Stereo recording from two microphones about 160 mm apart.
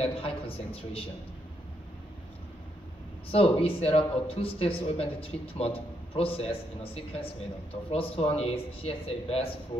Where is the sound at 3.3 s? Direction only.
35° left (ahead or behind).